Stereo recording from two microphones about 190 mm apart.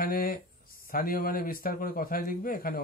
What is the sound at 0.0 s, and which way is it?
Speech, 50° left (ahead or behind).